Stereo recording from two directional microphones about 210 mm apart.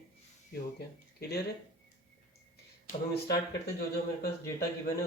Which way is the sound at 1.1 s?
50° left (ahead or behind).